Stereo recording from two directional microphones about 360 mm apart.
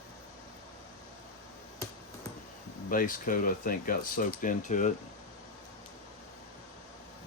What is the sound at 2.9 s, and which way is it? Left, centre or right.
Speech, left.